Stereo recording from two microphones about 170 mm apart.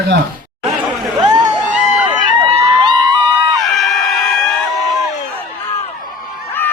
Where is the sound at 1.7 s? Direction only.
5° right (ahead or behind).